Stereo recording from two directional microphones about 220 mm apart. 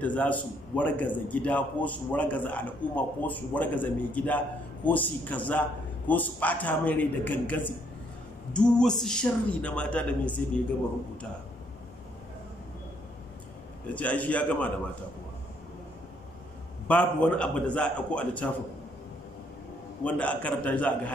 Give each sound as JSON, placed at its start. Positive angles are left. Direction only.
{"t": 0.0, "sound": "a man's voice", "side_deg": 5}
{"t": 13.9, "sound": "a man's voice", "side_deg": 5}
{"t": 16.8, "sound": "a man's voice", "side_deg": 5}
{"t": 20.0, "sound": "a man's voice", "side_deg": 5}